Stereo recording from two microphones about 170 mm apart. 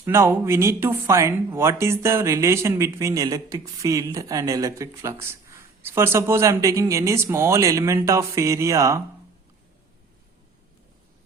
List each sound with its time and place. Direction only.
0.0 s speech: 15° right (ahead or behind)